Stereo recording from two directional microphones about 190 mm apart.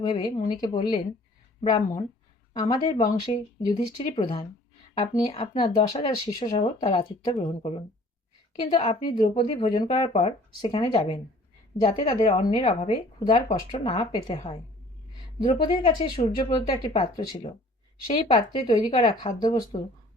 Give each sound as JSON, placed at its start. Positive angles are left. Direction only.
{"t": 0.0, "sound": "speech", "side_deg": 20}
{"t": 10.1, "sound": "speech", "side_deg": 35}
{"t": 10.6, "sound": "speech", "side_deg": 25}